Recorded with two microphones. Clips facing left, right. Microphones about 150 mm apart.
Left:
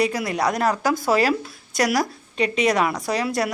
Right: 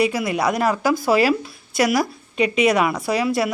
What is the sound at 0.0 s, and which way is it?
A woman's voice, 5° right (ahead or behind).